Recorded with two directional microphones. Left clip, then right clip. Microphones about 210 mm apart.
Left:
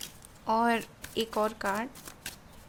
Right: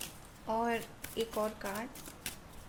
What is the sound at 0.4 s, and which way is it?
Speech, 45° left (ahead or behind).